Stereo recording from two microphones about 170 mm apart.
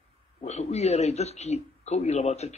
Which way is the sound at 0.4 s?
40° left (ahead or behind).